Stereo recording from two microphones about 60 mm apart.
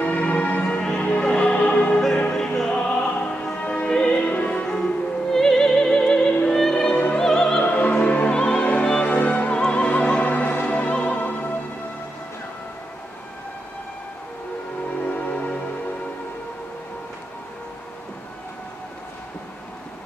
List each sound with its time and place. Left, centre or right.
0.0 s music: left
2.3 s music: centre
4.6 s music: centre
7.6 s opera: left
9.1 s music: left
11.1 s music: left
15.1 s music: left